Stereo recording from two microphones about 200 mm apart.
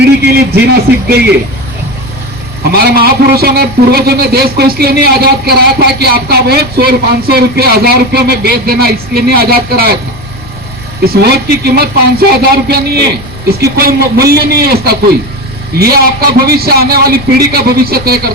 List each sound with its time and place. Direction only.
0.0 s a man's voice: 55° right (ahead or behind)
2.7 s a man's voice: 50° right (ahead or behind)
11.0 s a man's voice: 50° right (ahead or behind)